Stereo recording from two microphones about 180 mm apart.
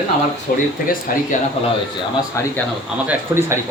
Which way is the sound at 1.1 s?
55° left (ahead or behind).